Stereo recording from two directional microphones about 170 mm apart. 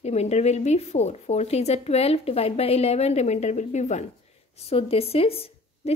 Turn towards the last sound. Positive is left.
turn(degrees=35)  # may be behind; listen again after turning